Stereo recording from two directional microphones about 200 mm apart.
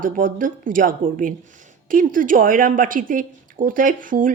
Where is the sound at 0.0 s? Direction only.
40° right (ahead or behind).